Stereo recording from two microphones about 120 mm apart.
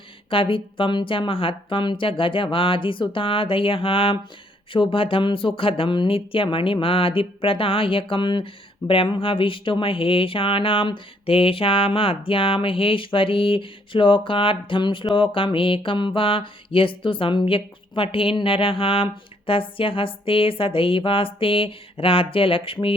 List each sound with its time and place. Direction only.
0.3 s speech: 45° left (ahead or behind)